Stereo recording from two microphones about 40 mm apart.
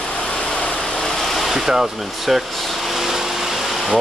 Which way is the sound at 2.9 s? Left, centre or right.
Centre.